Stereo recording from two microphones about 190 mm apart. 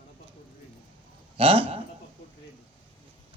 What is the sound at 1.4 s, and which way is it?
Speech, 30° right (ahead or behind).